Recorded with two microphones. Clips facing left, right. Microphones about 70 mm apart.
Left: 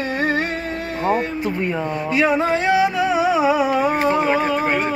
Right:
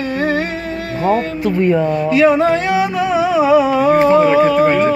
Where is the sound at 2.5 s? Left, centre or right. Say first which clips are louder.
Right 2 dB; left.